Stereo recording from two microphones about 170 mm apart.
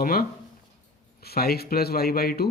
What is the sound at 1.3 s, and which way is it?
Speech, 65° left (ahead or behind).